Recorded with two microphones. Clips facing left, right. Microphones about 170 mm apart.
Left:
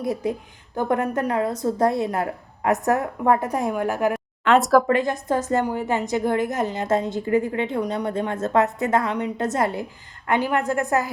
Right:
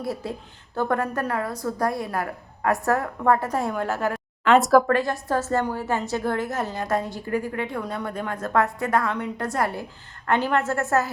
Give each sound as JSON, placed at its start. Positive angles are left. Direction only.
{"t": 0.0, "sound": "a woman's voice", "side_deg": 20}
{"t": 4.4, "sound": "speech", "side_deg": 0}
{"t": 4.9, "sound": "a woman's voice", "side_deg": 20}